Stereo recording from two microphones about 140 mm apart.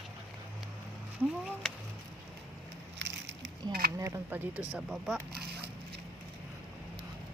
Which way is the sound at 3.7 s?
90° right.